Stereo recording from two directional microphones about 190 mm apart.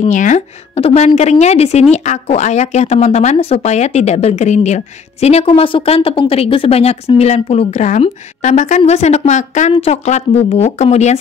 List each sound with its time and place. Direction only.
0.1 s a woman's voice: 40° left (ahead or behind)